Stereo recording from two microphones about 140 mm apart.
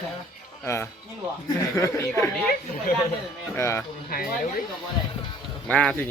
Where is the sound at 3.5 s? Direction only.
15° left (ahead or behind).